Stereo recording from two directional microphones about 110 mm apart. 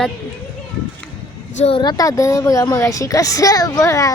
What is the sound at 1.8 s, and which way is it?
A child's voice, 35° left (ahead or behind).